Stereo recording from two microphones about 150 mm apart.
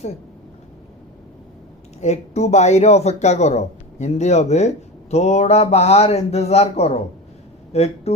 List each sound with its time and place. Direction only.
2.0 s speech: 50° left (ahead or behind)